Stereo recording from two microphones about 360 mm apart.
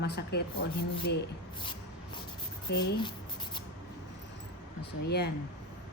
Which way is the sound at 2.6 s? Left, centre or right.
Left.